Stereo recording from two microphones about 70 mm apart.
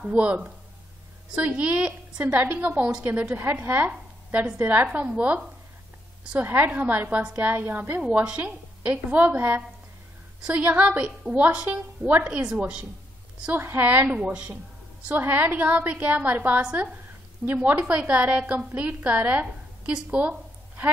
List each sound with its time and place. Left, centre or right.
0.1 s a woman's voice: centre
6.4 s a woman's voice: right
13.6 s a woman's voice: right